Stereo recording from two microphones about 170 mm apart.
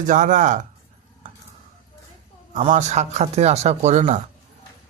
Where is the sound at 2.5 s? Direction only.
45° right (ahead or behind).